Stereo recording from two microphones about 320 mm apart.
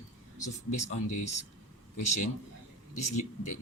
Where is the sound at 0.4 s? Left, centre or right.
Left.